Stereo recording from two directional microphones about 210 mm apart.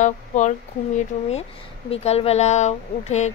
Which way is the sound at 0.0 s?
35° left (ahead or behind).